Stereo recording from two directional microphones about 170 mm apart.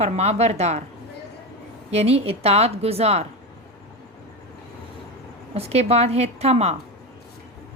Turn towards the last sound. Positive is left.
turn(degrees=-40)  # may be behind; listen again after turning